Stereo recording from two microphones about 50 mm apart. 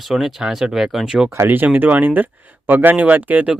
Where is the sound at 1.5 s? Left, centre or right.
Right.